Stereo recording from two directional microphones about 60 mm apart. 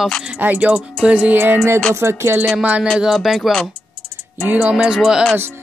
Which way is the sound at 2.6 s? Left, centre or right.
Right.